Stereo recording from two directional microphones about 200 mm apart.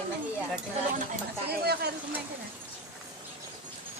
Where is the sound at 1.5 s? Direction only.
55° right (ahead or behind).